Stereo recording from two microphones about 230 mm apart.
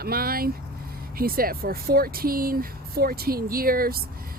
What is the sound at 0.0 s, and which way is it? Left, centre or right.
A woman's voice, right.